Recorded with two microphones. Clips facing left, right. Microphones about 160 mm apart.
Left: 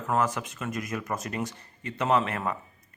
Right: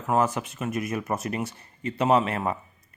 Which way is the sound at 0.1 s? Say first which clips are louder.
Right 3 dB; 20° right (ahead or behind).